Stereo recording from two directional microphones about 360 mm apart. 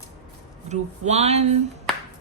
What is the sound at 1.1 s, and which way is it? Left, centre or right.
Speech, centre.